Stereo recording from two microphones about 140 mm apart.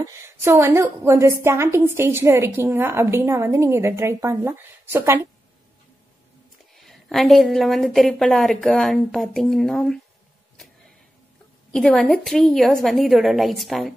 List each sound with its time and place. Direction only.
0.0 s a woman's voice: 20° right (ahead or behind)
6.7 s a woman's voice: centre (ahead or behind)
11.7 s a woman's voice: 5° left (ahead or behind)